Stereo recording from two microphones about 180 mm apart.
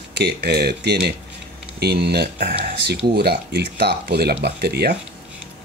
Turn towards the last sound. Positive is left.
turn(degrees=-65)  # may be behind; listen again after turning